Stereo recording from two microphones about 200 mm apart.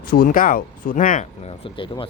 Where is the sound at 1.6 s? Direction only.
25° left (ahead or behind).